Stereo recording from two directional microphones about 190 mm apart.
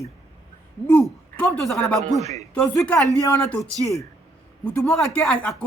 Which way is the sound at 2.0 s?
35° right (ahead or behind).